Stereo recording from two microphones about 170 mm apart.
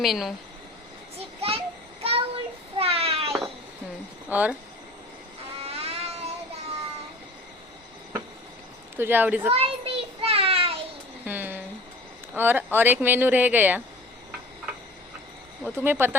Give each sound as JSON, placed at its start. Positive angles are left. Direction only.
{"t": 0.0, "sound": "speech", "side_deg": 0}
{"t": 1.4, "sound": "a sound", "side_deg": -35}
{"t": 2.0, "sound": "child singing", "side_deg": -35}
{"t": 4.3, "sound": "speech", "side_deg": -10}
{"t": 5.5, "sound": "a sound", "side_deg": -35}
{"t": 9.0, "sound": "speech", "side_deg": -10}
{"t": 9.5, "sound": "child singing", "side_deg": -35}
{"t": 11.3, "sound": "a sound", "side_deg": -10}
{"t": 12.3, "sound": "speech", "side_deg": -10}
{"t": 15.6, "sound": "speech", "side_deg": -10}